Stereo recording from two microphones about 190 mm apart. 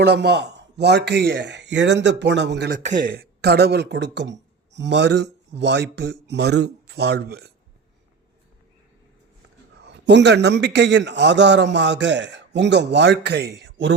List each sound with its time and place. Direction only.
0.0 s a man's voice: 60° right (ahead or behind)
2.8 s speech: 45° right (ahead or behind); by 7.5 s 60° right (ahead or behind)
9.8 s a man's voice: 65° right (ahead or behind)